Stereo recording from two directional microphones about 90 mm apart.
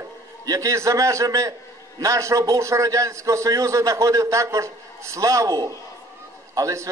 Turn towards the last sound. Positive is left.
turn(degrees=-40)  # may be behind; listen again after turning